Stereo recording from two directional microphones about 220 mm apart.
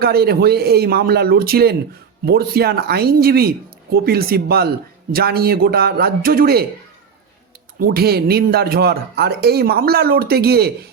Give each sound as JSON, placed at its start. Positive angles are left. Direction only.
{"t": 0.0, "sound": "speech", "side_deg": -45}
{"t": 7.8, "sound": "speech", "side_deg": -45}